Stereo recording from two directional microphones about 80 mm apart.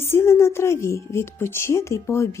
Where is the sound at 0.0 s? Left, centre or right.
Left.